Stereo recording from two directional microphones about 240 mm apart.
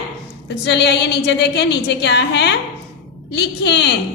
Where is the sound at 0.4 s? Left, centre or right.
Left.